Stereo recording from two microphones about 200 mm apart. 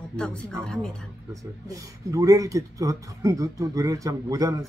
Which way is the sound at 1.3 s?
15° right (ahead or behind).